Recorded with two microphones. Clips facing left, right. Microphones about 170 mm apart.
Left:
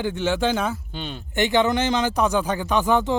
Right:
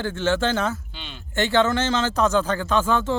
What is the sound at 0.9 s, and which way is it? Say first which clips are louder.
Speech: left 8 dB; 45° left (ahead or behind).